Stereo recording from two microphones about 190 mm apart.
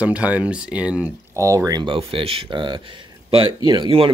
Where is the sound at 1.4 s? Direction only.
15° right (ahead or behind).